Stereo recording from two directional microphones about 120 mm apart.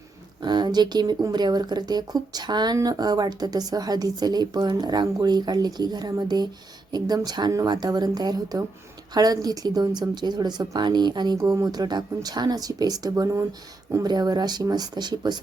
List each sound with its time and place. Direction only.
0.4 s speech: 35° right (ahead or behind)